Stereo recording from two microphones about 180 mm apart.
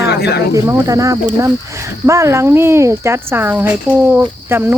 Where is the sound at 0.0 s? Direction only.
65° left (ahead or behind).